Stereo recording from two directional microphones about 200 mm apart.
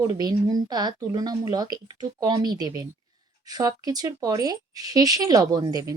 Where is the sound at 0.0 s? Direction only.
20° right (ahead or behind).